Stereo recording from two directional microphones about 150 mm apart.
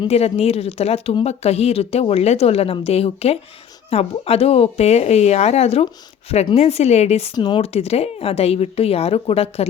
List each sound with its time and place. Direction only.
0.1 s speech: 45° left (ahead or behind)
7.3 s speech: 35° left (ahead or behind)